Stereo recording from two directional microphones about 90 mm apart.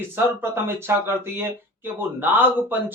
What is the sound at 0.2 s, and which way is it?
Speech, 25° right (ahead or behind).